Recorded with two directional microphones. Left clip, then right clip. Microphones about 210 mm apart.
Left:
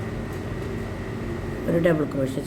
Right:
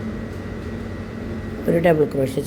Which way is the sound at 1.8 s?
25° right (ahead or behind).